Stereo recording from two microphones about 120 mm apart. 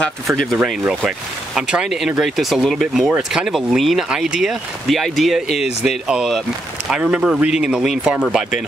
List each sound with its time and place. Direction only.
0.3 s speech: 5° left (ahead or behind)